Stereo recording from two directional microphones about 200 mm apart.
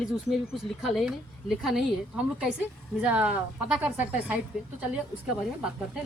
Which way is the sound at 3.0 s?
5° right (ahead or behind).